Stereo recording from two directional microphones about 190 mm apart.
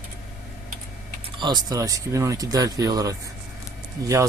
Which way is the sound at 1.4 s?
20° right (ahead or behind).